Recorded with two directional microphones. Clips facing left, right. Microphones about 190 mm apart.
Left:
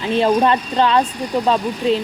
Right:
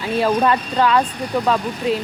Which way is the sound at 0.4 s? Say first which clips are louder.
Left 1 dB; 25° left (ahead or behind).